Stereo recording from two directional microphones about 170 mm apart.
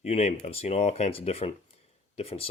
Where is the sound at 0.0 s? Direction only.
40° left (ahead or behind).